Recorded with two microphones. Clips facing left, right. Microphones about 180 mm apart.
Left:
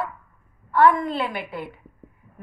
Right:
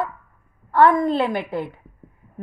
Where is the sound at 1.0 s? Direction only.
25° right (ahead or behind).